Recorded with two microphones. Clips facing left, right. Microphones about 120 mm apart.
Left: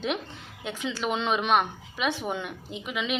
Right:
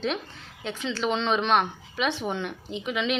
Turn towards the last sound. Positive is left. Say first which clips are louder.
# right 4 dB
turn(degrees=5)  # may be behind; listen again after turning